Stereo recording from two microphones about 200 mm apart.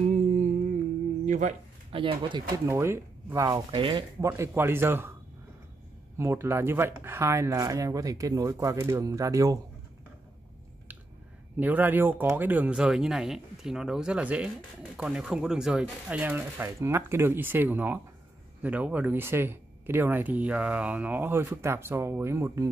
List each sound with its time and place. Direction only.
0.0 s music: 35° right (ahead or behind)
1.2 s speech: 35° right (ahead or behind)
2.5 s speech: 15° right (ahead or behind)
4.2 s speech: 10° right (ahead or behind)
6.1 s speech: 10° right (ahead or behind)
11.6 s speech: 10° right (ahead or behind)